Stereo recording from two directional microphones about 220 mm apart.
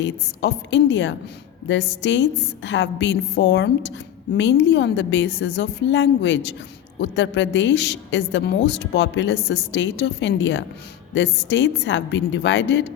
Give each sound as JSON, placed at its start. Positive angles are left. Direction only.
{"t": 0.0, "sound": "a woman's voice", "side_deg": 55}